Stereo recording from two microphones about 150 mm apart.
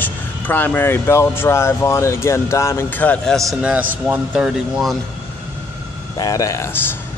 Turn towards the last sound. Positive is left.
turn(degrees=15)  # may be behind; listen again after turning